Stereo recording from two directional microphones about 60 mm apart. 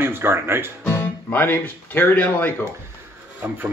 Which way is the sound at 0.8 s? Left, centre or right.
Left.